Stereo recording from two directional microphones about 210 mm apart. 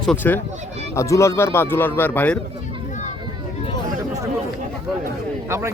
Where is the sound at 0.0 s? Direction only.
5° left (ahead or behind).